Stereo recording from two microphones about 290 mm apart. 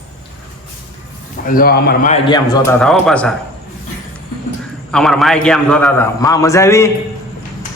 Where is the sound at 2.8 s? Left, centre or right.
Centre.